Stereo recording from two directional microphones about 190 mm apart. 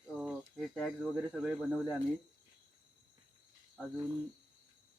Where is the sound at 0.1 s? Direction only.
5° right (ahead or behind).